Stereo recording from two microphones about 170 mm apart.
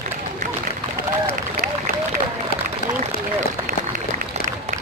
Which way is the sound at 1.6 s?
55° right (ahead or behind).